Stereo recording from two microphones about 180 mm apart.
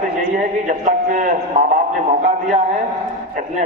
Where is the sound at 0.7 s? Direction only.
45° right (ahead or behind).